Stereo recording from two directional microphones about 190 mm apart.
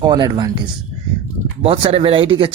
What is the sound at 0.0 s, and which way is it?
Speech, 20° right (ahead or behind).